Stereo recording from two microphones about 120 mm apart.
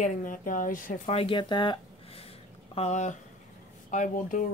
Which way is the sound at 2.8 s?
75° left (ahead or behind).